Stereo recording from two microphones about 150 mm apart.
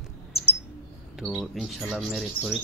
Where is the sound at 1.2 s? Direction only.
5° right (ahead or behind).